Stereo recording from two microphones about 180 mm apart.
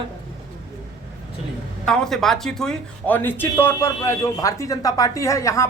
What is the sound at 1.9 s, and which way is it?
Speech, centre (ahead or behind).